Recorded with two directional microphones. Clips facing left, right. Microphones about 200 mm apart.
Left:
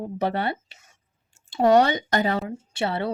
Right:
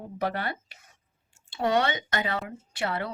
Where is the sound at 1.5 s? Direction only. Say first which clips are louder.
Left 8 dB; 40° left (ahead or behind).